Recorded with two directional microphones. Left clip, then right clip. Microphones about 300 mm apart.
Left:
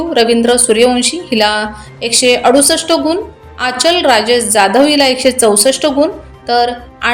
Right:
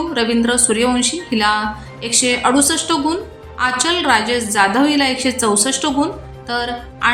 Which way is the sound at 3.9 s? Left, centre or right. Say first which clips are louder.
Left 6 dB; right.